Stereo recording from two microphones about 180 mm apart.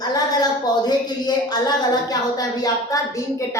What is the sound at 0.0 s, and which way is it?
A woman's voice, 20° left (ahead or behind).